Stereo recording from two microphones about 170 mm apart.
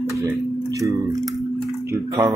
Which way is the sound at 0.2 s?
15° right (ahead or behind).